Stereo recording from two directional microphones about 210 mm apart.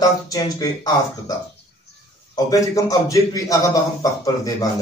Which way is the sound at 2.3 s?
15° left (ahead or behind).